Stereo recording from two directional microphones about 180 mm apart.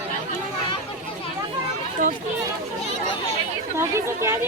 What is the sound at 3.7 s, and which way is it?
Chatter, 15° right (ahead or behind).